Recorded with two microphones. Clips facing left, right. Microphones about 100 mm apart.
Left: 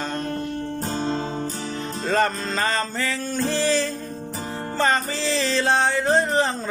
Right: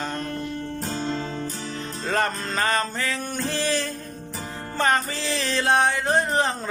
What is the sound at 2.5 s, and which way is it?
Music, 10° right (ahead or behind).